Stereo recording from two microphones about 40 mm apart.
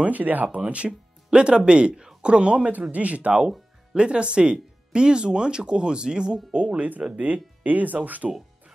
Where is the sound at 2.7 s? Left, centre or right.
Right.